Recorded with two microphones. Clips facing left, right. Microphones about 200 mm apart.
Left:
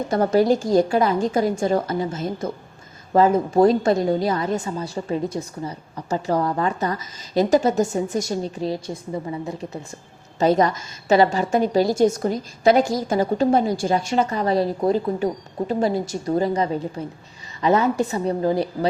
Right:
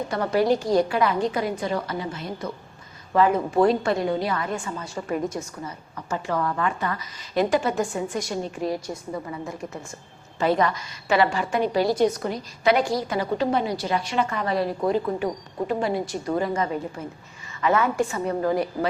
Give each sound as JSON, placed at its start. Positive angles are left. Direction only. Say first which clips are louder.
{"t": 0.1, "sound": "a woman's voice", "louder": "left 4 dB", "side_deg": 40}
{"t": 10.4, "sound": "a woman's voice", "louder": "left 4 dB", "side_deg": 40}
{"t": 18.1, "sound": "a woman's voice", "louder": "left 3 dB", "side_deg": 35}